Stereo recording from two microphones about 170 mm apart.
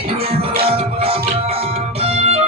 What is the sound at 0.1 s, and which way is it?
Music, 35° right (ahead or behind).